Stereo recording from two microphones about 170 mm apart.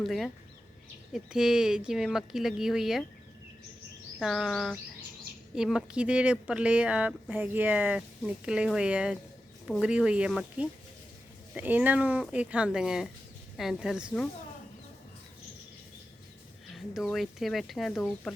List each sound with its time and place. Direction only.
0.0 s speech: centre (ahead or behind)
4.2 s speech: centre (ahead or behind)
16.7 s speech: centre (ahead or behind)